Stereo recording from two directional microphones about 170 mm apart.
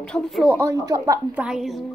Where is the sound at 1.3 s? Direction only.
5° right (ahead or behind).